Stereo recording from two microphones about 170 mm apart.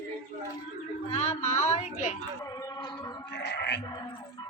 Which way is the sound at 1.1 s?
40° left (ahead or behind).